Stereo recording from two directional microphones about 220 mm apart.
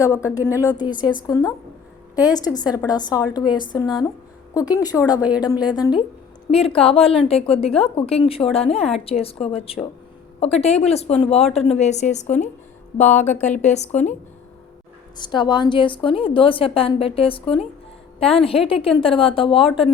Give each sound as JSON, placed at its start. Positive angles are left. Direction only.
{"t": 0.0, "sound": "a woman's voice", "side_deg": 15}
{"t": 5.2, "sound": "speech", "side_deg": -5}
{"t": 5.7, "sound": "a woman's voice", "side_deg": 20}
{"t": 15.2, "sound": "a woman's voice", "side_deg": 20}